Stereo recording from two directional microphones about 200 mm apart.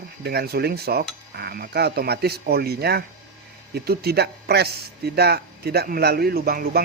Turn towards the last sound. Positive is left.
turn(degrees=-50)  # may be behind; listen again after turning